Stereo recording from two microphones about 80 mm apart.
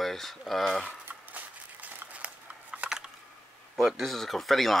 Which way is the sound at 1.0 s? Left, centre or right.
Right.